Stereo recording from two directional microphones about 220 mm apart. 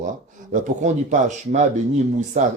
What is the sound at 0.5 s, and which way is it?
Speech, 35° right (ahead or behind).